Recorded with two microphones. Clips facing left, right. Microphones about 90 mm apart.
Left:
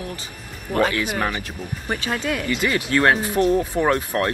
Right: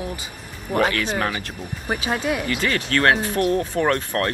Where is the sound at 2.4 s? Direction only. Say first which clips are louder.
Left 1 dB; 15° left (ahead or behind).